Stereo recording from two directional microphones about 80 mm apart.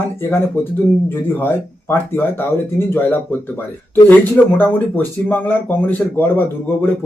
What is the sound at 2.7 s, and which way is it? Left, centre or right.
Speech, left.